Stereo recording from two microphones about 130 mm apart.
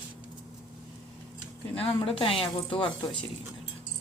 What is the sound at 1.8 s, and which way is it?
Speech, 45° left (ahead or behind).